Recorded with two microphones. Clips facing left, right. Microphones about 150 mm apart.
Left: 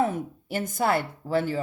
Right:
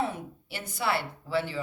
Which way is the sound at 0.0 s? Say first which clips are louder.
Left 6 dB; 45° left (ahead or behind).